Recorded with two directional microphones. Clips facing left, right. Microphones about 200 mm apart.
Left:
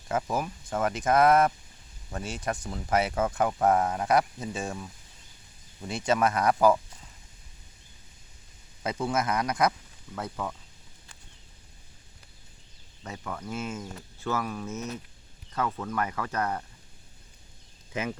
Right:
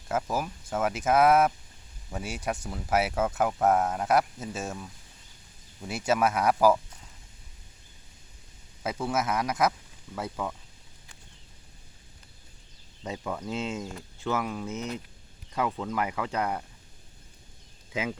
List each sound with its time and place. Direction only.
0.1 s speech: 5° right (ahead or behind)
8.8 s speech: 5° right (ahead or behind)
13.0 s speech: 15° right (ahead or behind)